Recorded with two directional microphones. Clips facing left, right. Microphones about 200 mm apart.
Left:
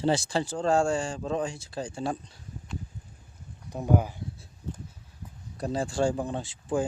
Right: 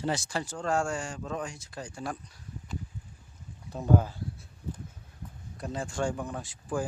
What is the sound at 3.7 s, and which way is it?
Speech, 15° left (ahead or behind).